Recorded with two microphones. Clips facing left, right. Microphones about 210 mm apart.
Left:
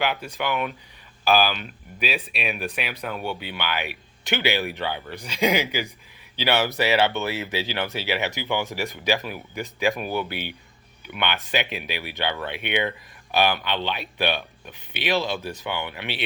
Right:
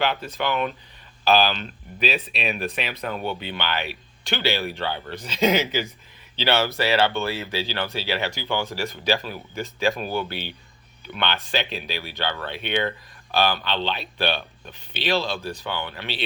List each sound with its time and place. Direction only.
0.0 s speech: 10° left (ahead or behind)